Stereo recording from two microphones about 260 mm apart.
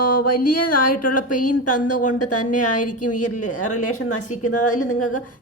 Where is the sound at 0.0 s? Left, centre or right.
Left.